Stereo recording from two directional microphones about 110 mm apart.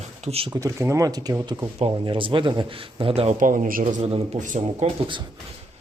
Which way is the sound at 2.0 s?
50° right (ahead or behind).